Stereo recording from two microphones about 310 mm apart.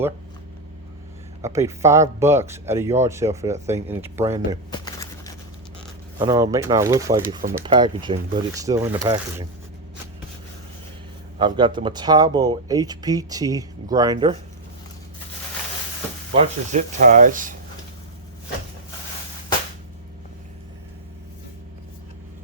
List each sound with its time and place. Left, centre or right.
1.4 s speech: centre
4.7 s a sound: centre
6.1 s speech: centre
11.3 s speech: centre
16.3 s speech: right